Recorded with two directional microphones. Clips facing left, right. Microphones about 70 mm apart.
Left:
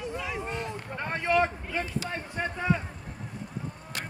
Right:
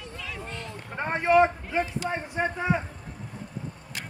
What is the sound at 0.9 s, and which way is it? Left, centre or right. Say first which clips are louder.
Speech: right 5 dB; right.